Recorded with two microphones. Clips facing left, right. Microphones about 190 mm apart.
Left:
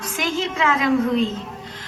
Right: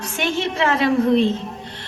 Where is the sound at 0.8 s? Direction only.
30° right (ahead or behind).